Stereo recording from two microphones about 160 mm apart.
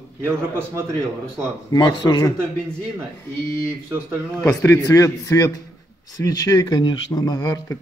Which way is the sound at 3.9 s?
15° right (ahead or behind).